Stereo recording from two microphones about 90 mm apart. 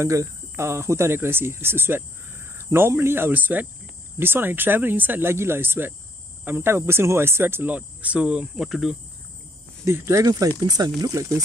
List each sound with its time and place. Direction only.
0.0 s speech: 35° right (ahead or behind); by 8.9 s 5° right (ahead or behind)
9.8 s speech: 35° right (ahead or behind)
10.6 s speech: 45° right (ahead or behind)